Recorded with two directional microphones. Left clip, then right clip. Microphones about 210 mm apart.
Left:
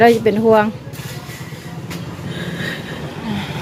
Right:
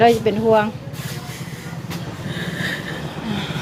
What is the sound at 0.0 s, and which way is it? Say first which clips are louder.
Speech: left 3 dB; 25° left (ahead or behind).